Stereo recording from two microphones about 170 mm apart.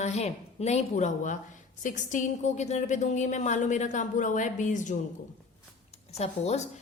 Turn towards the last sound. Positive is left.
turn(degrees=40)  # may be behind; listen again after turning